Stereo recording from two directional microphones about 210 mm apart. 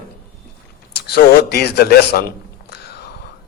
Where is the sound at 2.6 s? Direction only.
50° left (ahead or behind).